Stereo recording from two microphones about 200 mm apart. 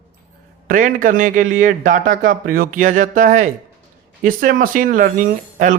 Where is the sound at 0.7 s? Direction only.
40° right (ahead or behind).